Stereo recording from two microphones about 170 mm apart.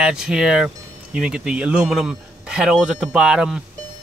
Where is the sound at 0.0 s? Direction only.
5° right (ahead or behind).